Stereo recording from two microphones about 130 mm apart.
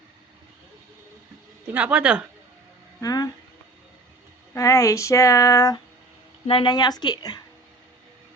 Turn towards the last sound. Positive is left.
turn(degrees=30)  # may be behind; listen again after turning